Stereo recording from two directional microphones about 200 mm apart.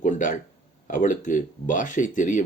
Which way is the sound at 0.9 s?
40° left (ahead or behind).